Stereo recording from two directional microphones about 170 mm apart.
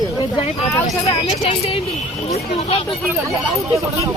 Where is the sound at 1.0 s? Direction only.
35° left (ahead or behind).